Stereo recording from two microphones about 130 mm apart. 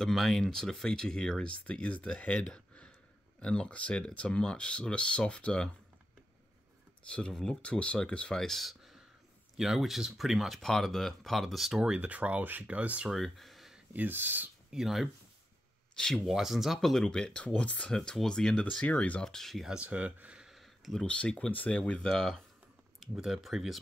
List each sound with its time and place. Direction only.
0.0 s speech: 5° left (ahead or behind)
7.1 s speech: 10° left (ahead or behind); by 13.2 s 10° right (ahead or behind)
13.2 s a sound: centre (ahead or behind)
13.9 s speech: 15° right (ahead or behind)
14.8 s speech: centre (ahead or behind)